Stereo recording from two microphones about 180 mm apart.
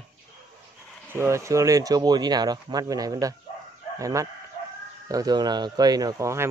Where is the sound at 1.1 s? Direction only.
15° right (ahead or behind).